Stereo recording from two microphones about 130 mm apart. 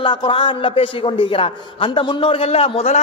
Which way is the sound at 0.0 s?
40° left (ahead or behind).